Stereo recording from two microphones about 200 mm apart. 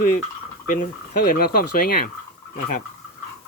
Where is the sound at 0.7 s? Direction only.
50° left (ahead or behind).